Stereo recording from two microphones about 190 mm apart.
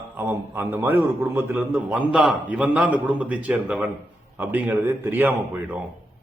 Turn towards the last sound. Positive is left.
turn(degrees=-10)  # may be behind; listen again after turning